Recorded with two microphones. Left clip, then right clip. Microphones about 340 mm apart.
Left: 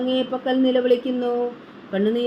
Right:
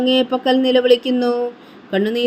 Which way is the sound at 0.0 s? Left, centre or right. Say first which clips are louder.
Right 7 dB; right.